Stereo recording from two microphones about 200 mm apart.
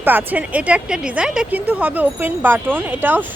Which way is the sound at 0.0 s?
10° right (ahead or behind).